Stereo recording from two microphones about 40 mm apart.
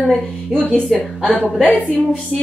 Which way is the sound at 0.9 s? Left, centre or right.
Centre.